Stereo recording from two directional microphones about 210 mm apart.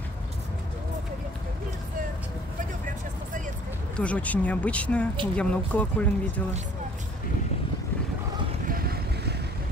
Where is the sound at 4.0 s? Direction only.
5° left (ahead or behind).